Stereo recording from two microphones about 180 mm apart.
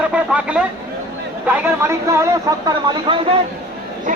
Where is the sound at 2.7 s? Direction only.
25° right (ahead or behind).